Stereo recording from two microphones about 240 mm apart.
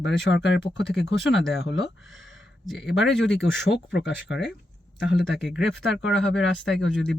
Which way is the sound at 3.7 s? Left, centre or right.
Left.